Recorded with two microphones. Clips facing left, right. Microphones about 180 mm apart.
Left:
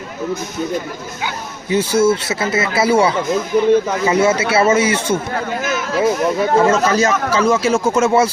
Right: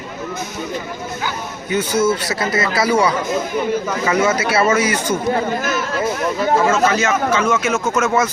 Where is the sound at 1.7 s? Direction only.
30° left (ahead or behind).